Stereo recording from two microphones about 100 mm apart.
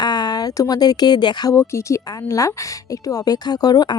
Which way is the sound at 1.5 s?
25° left (ahead or behind).